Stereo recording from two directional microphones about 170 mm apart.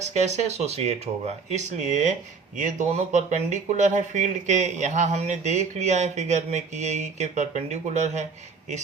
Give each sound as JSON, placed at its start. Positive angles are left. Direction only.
{"t": 0.0, "sound": "speech", "side_deg": -40}